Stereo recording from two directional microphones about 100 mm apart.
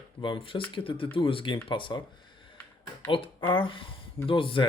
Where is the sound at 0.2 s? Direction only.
60° left (ahead or behind).